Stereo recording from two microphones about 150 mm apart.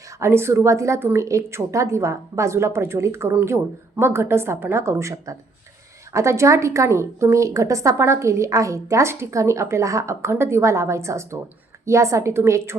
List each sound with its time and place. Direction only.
0.2 s a woman's voice: 15° right (ahead or behind)